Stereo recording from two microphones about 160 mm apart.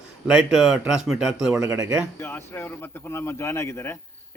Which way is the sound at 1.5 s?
20° right (ahead or behind).